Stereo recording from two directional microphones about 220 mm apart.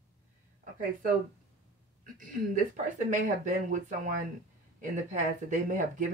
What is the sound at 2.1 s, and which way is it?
Speech, 35° right (ahead or behind).